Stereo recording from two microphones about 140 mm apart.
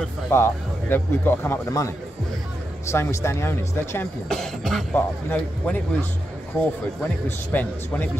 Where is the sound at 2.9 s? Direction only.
20° left (ahead or behind).